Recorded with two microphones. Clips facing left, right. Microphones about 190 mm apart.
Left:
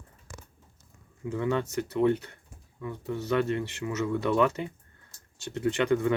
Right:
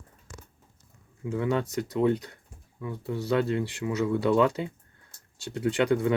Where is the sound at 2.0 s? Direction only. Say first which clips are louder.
Even; 15° right (ahead or behind).